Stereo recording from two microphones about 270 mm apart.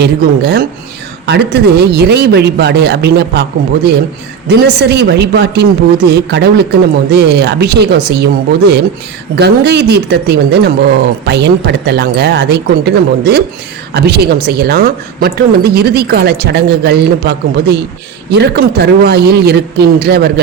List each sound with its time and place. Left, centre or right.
0.0 s a woman's voice: right
4.4 s a woman's voice: right